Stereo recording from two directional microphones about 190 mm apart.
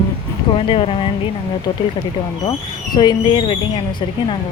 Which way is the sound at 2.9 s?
25° left (ahead or behind).